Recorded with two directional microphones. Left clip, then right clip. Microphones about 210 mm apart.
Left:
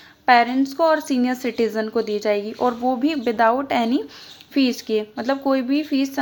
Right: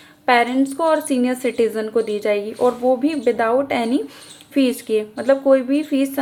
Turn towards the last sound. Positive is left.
turn(degrees=20)  # may be behind; listen again after turning